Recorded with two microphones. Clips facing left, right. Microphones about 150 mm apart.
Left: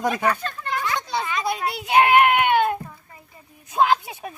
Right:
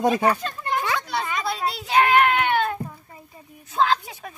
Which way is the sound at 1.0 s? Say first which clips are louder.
Left 1 dB; 15° left (ahead or behind).